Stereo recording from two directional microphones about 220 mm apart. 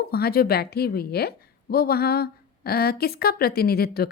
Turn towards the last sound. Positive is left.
turn(degrees=45)  # may be behind; listen again after turning